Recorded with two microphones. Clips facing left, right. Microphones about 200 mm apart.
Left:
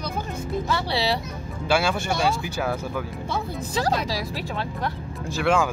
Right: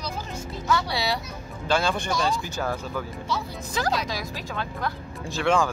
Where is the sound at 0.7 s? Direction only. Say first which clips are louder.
Right 1 dB; 30° left (ahead or behind).